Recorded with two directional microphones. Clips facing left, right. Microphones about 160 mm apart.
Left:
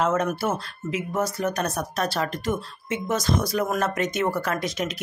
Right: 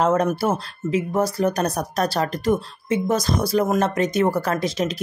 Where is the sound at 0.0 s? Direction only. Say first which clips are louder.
Right 4 dB; 35° right (ahead or behind).